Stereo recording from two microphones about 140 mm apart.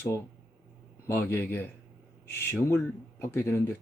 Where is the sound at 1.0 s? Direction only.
15° left (ahead or behind).